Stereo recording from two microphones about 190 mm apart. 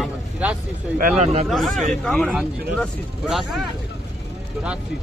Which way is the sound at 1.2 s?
35° right (ahead or behind).